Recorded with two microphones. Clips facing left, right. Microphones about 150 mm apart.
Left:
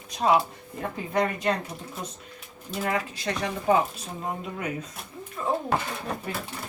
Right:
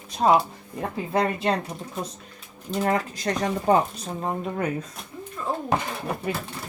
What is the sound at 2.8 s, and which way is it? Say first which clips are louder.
Speech: right 4 dB; 40° right (ahead or behind).